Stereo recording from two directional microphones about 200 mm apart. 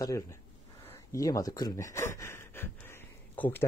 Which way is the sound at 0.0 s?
15° left (ahead or behind).